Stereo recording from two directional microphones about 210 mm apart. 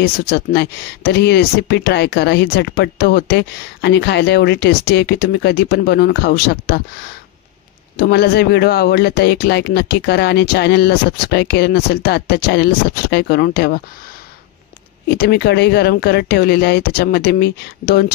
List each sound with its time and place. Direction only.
0.0 s speech: 50° left (ahead or behind)
15.0 s speech: 50° left (ahead or behind)